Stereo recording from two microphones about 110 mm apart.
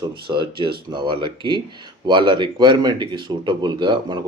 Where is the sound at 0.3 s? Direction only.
45° right (ahead or behind).